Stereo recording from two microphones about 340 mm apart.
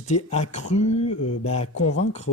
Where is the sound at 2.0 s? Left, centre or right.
Centre.